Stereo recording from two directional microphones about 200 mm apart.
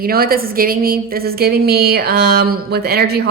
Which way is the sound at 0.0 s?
50° right (ahead or behind).